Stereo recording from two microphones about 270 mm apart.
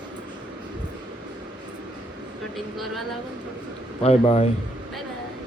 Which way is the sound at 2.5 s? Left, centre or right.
Centre.